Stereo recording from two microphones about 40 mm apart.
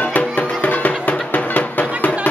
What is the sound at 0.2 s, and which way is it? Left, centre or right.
Music, left.